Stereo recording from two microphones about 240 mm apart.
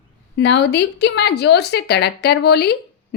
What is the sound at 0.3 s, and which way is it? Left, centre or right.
Speech, left.